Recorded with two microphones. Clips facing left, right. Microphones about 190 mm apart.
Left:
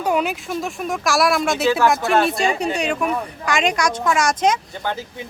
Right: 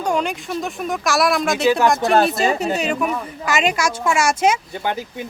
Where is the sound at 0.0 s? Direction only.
5° left (ahead or behind).